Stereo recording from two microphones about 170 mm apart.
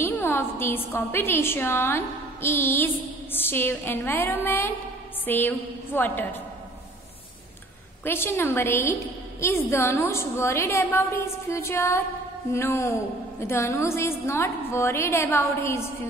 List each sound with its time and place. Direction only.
0.0 s a woman's voice: 15° left (ahead or behind)
8.0 s a woman's voice: 15° left (ahead or behind)